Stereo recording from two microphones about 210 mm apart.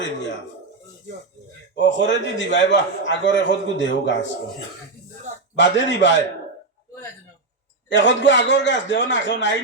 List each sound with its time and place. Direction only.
1.7 s a man's voice: 60° left (ahead or behind)
5.5 s a man's voice: 60° left (ahead or behind)
7.9 s a man's voice: 60° left (ahead or behind)